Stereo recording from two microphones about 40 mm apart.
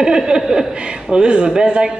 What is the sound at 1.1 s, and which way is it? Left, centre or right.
Speech, right.